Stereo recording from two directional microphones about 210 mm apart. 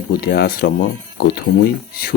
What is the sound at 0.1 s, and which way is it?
Speech, 50° left (ahead or behind).